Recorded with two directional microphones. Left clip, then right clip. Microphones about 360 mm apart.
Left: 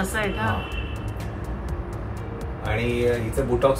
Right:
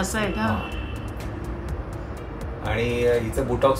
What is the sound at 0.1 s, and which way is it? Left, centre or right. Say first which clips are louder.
Speech: even; centre.